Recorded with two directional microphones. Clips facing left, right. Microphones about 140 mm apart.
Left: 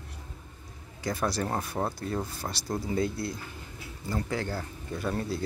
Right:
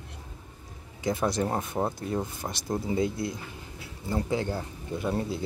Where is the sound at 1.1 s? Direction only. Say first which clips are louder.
Right 3 dB; 20° right (ahead or behind).